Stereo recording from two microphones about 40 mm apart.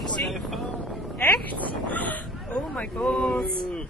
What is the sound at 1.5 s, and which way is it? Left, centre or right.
Speech, left.